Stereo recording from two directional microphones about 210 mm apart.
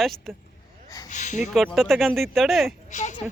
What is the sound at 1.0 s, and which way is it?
Speech, 35° left (ahead or behind).